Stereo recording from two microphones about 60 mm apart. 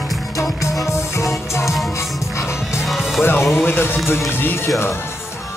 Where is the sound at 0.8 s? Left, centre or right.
Left.